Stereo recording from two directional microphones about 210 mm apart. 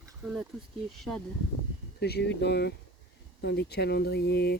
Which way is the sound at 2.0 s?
50° left (ahead or behind).